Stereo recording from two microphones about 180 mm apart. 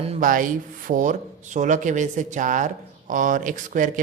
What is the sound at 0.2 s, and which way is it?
Speech, 50° right (ahead or behind).